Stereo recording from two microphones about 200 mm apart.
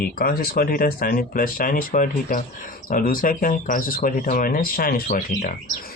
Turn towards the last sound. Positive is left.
turn(degrees=40)  # may be behind; listen again after turning